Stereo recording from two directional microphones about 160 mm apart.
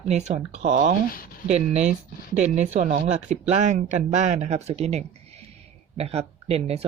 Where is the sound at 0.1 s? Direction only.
45° right (ahead or behind).